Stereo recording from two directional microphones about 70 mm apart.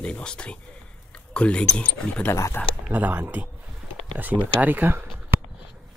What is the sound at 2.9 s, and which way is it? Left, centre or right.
Speech, right.